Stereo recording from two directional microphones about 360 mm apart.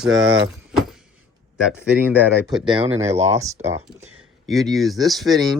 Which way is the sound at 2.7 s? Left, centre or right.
Centre.